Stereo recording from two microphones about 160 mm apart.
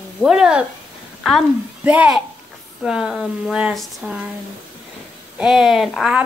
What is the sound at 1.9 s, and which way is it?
A child's voice, 5° right (ahead or behind).